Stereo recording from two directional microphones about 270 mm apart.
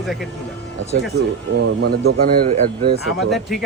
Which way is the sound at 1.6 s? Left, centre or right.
Right.